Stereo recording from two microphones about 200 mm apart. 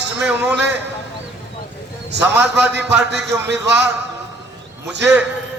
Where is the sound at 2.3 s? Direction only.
10° right (ahead or behind).